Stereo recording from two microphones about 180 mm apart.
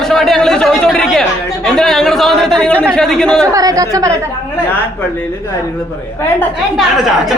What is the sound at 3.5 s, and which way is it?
Speech, 20° right (ahead or behind).